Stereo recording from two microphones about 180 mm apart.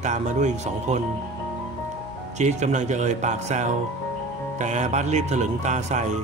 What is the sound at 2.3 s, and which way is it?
A man's voice, 40° right (ahead or behind).